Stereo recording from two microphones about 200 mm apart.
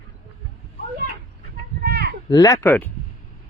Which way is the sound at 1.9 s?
55° right (ahead or behind).